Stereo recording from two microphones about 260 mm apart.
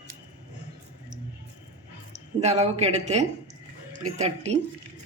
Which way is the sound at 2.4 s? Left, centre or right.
Right.